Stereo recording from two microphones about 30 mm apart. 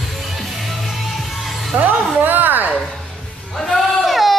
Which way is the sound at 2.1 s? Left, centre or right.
Right.